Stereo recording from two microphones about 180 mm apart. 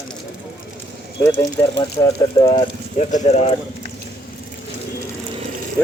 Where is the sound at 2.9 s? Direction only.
40° left (ahead or behind).